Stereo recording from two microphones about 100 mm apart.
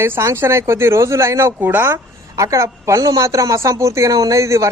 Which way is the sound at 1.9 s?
30° right (ahead or behind).